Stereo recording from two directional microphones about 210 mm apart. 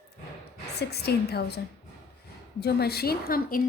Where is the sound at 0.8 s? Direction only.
50° left (ahead or behind).